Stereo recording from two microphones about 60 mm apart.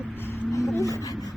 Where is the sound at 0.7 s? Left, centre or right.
Left.